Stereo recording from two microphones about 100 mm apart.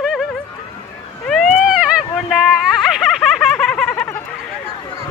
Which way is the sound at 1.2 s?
5° left (ahead or behind).